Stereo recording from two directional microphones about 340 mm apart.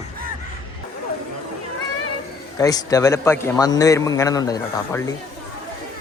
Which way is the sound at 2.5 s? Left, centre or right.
Centre.